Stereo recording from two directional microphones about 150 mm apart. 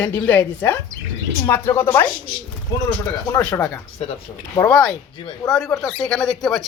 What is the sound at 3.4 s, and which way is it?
Speech, 10° left (ahead or behind).